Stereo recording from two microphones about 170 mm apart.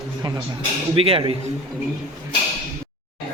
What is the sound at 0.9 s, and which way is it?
Speech, 35° right (ahead or behind).